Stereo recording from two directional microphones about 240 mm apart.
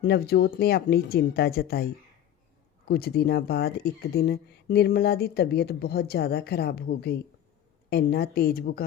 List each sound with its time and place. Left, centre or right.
0.0 s speech: left